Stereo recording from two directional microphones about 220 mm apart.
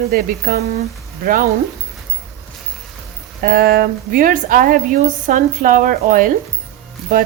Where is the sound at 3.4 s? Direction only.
45° right (ahead or behind).